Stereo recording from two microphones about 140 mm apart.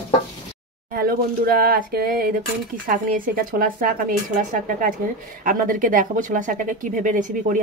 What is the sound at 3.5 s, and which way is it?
Speech, 85° right.